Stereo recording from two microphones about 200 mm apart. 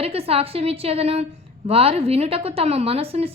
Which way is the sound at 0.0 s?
30° right (ahead or behind).